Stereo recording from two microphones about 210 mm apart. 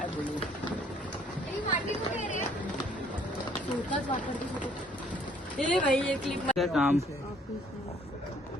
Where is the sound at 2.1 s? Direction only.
35° left (ahead or behind).